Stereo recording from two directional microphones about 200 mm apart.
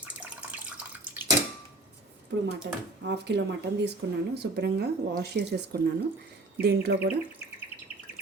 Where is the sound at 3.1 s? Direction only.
60° right (ahead or behind).